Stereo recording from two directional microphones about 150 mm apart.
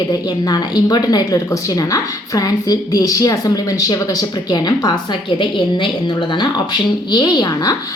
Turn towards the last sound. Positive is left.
turn(degrees=25)  # may be behind; listen again after turning